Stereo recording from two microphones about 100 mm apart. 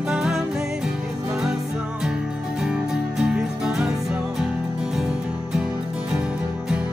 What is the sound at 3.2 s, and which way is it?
Music, 10° right (ahead or behind).